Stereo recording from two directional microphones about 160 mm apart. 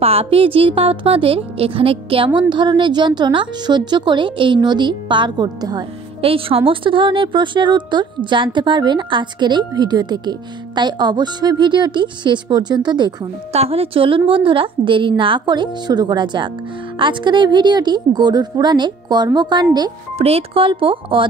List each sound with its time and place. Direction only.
0.0 s a woman's voice: 40° right (ahead or behind)
6.2 s a woman's voice: 35° right (ahead or behind)
13.5 s a woman's voice: 40° right (ahead or behind)
20.2 s a woman's voice: 40° right (ahead or behind)